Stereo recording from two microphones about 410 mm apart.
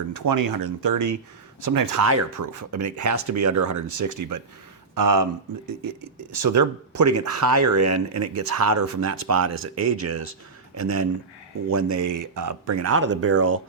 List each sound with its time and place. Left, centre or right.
0.1 s speech: right
6.4 s speech: right